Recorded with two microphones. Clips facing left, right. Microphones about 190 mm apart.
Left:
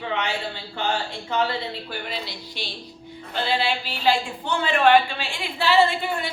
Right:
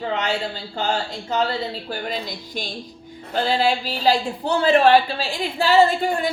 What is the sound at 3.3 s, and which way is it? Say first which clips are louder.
Speech: right 4 dB; 40° right (ahead or behind).